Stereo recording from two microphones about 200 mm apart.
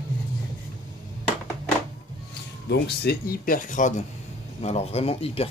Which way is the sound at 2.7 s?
55° left (ahead or behind).